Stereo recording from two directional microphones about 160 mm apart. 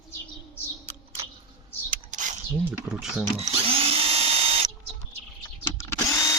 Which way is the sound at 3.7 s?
35° right (ahead or behind).